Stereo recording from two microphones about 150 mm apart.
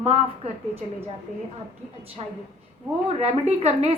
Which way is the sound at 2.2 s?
40° right (ahead or behind).